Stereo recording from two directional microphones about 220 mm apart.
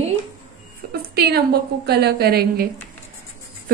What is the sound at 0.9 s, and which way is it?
A woman's voice, 45° right (ahead or behind).